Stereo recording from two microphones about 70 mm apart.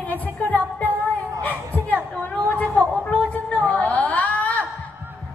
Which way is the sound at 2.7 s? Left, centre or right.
Centre.